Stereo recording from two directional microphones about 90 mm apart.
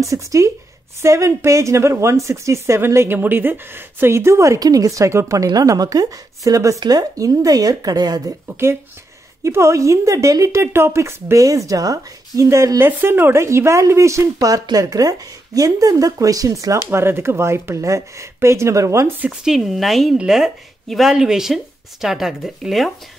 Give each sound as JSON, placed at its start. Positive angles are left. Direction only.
{"t": 0.1, "sound": "a woman's voice", "side_deg": -35}
{"t": 8.5, "sound": "a woman's voice", "side_deg": -25}
{"t": 19.4, "sound": "speech", "side_deg": -5}